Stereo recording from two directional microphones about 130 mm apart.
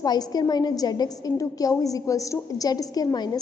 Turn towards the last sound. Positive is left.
turn(degrees=30)  # may be behind; listen again after turning